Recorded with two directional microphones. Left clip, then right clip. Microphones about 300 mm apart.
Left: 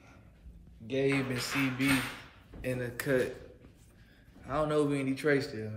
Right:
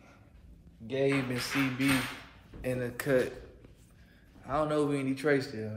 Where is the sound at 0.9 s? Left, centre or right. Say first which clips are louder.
Right 1 dB; centre.